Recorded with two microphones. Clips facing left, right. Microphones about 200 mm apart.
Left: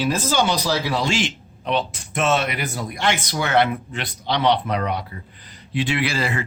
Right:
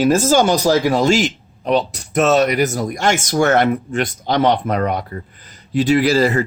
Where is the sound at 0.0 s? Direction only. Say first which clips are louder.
Right 7 dB; 45° right (ahead or behind).